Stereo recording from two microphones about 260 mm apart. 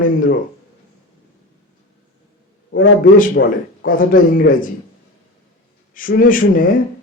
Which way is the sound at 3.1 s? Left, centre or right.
Left.